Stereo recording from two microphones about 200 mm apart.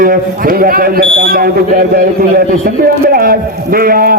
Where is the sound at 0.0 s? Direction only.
45° right (ahead or behind).